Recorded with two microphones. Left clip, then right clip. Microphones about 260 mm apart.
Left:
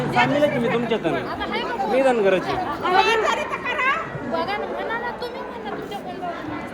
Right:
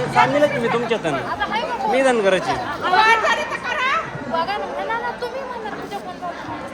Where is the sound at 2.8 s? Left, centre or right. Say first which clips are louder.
Right 3 dB; centre.